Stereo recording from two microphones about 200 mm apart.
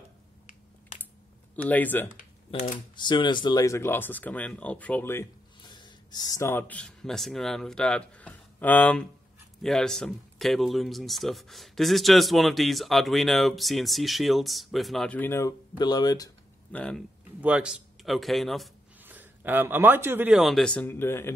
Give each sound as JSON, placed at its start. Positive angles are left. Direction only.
{"t": 1.6, "sound": "speech", "side_deg": 10}
{"t": 2.1, "sound": "typing", "side_deg": 40}
{"t": 3.0, "sound": "speech", "side_deg": 20}
{"t": 16.7, "sound": "speech", "side_deg": 5}
{"t": 17.4, "sound": "speech", "side_deg": -5}